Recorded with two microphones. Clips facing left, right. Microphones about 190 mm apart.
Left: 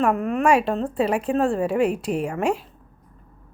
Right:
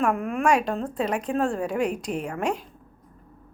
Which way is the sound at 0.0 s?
Centre (ahead or behind).